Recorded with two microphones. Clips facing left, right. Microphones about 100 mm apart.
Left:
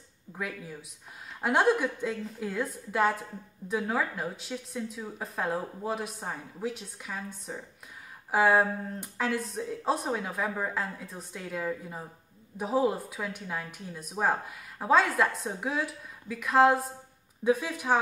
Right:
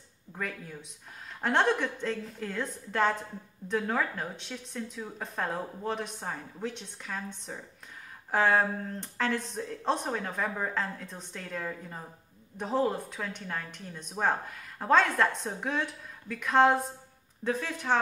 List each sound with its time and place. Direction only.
0.3 s a woman's voice: 5° left (ahead or behind)
17.4 s a woman's voice: 10° left (ahead or behind)